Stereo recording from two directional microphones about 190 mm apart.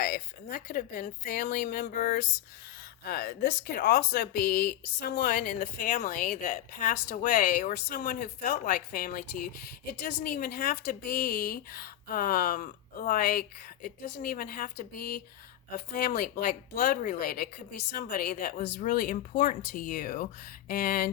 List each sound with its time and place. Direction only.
0.0 s speech: 50° left (ahead or behind)
10.1 s speech: 60° left (ahead or behind)